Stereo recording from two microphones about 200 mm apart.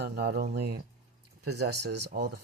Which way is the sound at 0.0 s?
50° right (ahead or behind).